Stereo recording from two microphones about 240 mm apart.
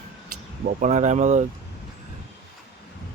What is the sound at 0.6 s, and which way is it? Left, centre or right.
Speech, right.